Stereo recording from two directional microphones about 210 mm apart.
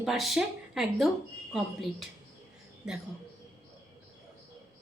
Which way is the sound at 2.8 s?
5° right (ahead or behind).